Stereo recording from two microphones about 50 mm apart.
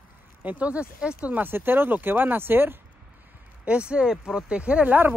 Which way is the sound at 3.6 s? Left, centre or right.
Right.